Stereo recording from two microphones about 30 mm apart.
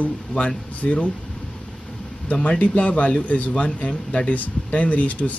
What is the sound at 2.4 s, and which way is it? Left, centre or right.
Speech, left.